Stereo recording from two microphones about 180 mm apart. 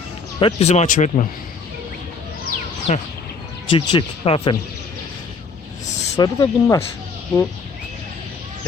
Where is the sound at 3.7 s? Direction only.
25° left (ahead or behind).